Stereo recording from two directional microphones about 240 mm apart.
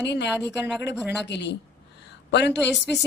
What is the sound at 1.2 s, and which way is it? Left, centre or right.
A woman's voice, left.